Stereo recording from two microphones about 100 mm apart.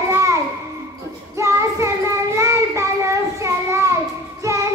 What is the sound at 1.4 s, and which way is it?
Child singing, 30° right (ahead or behind).